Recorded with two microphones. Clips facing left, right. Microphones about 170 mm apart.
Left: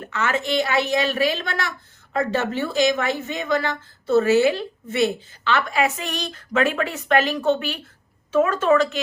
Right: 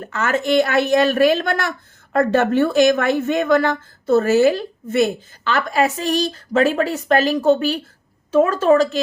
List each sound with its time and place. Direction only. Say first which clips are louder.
0.1 s a woman's voice: right 5 dB; 45° right (ahead or behind)